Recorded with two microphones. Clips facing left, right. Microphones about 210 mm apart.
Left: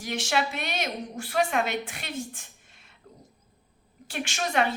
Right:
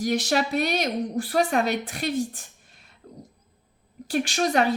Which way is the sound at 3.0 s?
35° right (ahead or behind).